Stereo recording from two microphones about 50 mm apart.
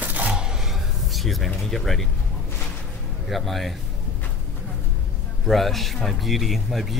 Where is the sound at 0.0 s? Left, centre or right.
Right.